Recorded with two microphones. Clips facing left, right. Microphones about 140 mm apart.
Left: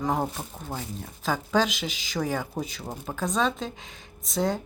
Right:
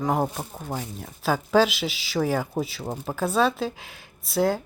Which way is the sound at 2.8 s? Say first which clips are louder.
Right 4 dB; 20° right (ahead or behind).